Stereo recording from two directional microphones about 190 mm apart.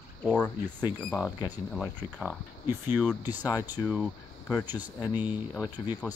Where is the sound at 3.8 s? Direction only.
Centre (ahead or behind).